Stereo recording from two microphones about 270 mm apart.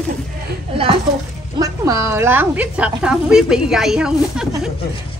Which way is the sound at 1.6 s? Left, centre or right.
Centre.